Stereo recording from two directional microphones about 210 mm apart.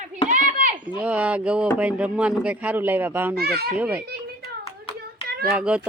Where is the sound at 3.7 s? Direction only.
5° right (ahead or behind).